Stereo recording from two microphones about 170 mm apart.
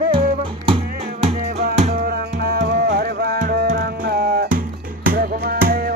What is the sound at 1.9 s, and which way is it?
Music, 65° right (ahead or behind).